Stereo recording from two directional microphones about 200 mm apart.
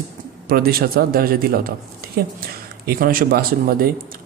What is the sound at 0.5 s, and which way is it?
Speech, 50° right (ahead or behind).